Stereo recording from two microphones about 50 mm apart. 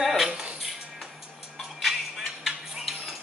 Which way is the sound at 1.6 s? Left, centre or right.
Centre.